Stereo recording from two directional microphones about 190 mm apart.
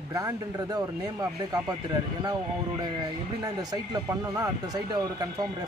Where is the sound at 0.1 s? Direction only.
20° right (ahead or behind).